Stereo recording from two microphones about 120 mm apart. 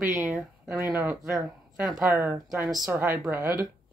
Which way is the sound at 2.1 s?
15° right (ahead or behind).